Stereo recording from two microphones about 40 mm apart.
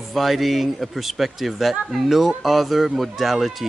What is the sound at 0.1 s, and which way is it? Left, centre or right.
Speech, centre.